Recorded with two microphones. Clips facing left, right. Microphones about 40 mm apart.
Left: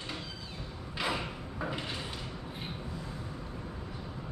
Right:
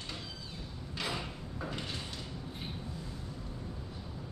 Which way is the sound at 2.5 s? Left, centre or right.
Left.